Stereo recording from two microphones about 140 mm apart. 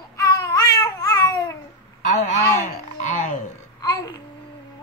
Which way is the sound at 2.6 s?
60° left (ahead or behind).